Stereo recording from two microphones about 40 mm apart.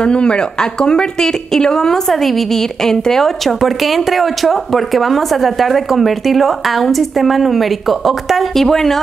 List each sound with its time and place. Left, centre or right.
0.0 s a woman's voice: left; by 9.0 s centre